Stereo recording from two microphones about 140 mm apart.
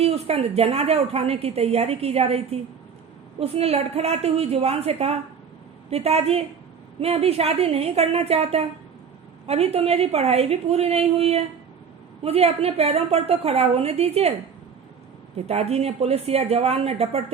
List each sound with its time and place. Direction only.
0.0 s a woman's voice: 45° right (ahead or behind)
15.4 s a woman's voice: 50° right (ahead or behind)